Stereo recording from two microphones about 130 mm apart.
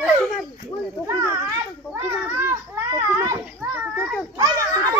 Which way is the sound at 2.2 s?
15° right (ahead or behind).